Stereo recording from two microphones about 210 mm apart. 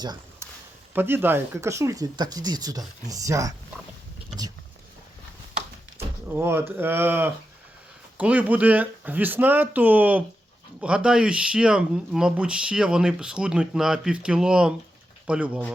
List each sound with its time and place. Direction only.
0.0 s a sound: 20° right (ahead or behind)
0.9 s speech: 10° right (ahead or behind)
6.2 s speech: 10° right (ahead or behind)